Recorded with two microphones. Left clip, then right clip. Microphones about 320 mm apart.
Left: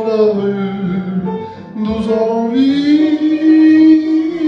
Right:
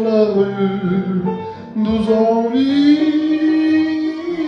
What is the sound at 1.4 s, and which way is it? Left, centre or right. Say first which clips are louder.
Music: even; centre.